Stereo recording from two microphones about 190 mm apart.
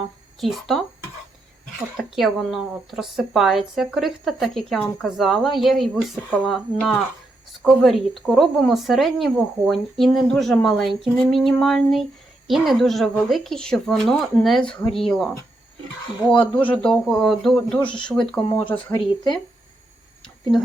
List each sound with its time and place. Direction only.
0.3 s speech: centre (ahead or behind)
2.0 s speech: centre (ahead or behind)
16.3 s speech: 10° left (ahead or behind)
18.9 s speech: 20° left (ahead or behind)